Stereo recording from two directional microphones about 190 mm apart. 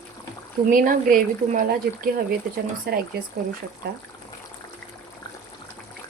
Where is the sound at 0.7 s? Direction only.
45° right (ahead or behind).